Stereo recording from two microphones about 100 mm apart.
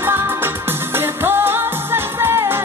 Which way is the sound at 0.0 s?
20° right (ahead or behind).